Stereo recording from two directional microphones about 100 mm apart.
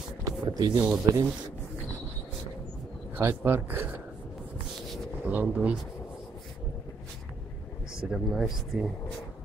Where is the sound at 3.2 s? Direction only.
20° right (ahead or behind).